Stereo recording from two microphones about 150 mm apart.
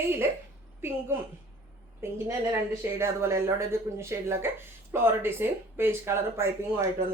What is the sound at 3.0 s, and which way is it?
Speech, 15° right (ahead or behind).